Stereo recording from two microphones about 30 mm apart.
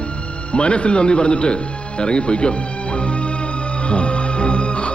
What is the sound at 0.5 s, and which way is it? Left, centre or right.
Speech, left.